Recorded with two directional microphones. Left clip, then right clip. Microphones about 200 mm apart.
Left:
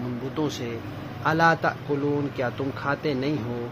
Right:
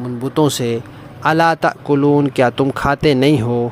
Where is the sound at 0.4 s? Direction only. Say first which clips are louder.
Right 14 dB; 65° right (ahead or behind).